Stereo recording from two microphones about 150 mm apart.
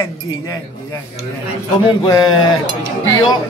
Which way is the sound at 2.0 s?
30° left (ahead or behind).